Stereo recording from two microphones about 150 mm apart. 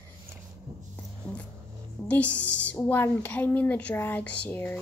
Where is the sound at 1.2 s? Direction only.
10° left (ahead or behind).